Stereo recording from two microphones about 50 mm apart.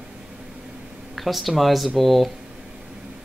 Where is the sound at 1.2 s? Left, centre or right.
Centre.